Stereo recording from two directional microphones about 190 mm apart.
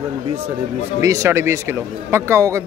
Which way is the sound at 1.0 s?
15° right (ahead or behind).